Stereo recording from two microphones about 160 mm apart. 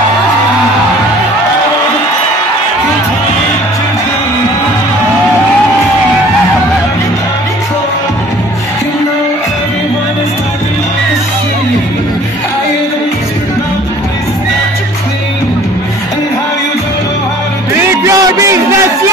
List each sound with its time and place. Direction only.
18.0 s music: 20° right (ahead or behind)